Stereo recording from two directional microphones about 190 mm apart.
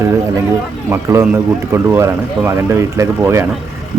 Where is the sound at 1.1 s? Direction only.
15° right (ahead or behind).